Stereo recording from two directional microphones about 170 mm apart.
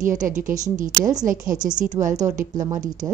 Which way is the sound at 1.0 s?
20° right (ahead or behind).